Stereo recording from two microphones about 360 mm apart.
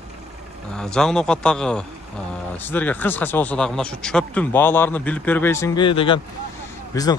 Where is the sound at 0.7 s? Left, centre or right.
Centre.